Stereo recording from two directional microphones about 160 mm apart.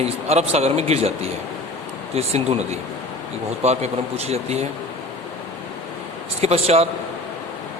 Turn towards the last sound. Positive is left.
turn(degrees=-40)  # may be behind; listen again after turning